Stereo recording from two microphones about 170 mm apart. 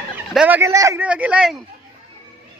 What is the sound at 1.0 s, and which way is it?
Speech, 5° right (ahead or behind).